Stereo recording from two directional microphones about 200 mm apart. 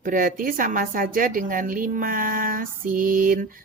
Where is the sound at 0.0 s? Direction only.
40° right (ahead or behind).